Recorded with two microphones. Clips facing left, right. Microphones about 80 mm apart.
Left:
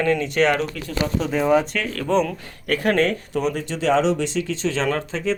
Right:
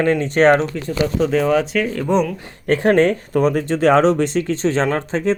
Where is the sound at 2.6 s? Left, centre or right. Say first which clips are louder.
Right 5 dB; right.